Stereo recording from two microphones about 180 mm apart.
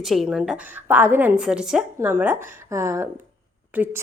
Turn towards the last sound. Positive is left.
turn(degrees=-10)  # may be behind; listen again after turning